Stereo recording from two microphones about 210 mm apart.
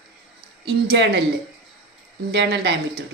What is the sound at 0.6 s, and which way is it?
Speech, 55° right (ahead or behind).